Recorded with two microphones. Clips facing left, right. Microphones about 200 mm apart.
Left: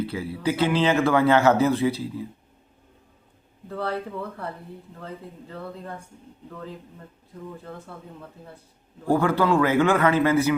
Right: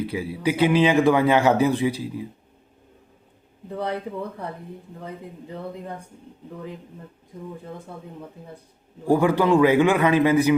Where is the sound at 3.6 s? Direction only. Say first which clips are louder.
Right 1 dB; 15° right (ahead or behind).